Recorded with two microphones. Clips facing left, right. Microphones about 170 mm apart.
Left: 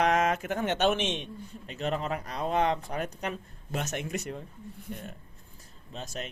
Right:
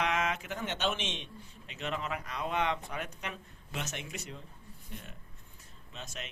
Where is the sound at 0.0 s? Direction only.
45° left (ahead or behind).